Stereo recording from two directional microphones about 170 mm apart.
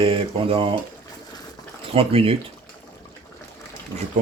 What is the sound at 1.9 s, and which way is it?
Speech, 35° right (ahead or behind).